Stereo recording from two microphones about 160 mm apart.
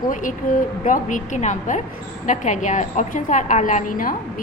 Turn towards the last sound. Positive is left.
turn(degrees=60)  # may be behind; listen again after turning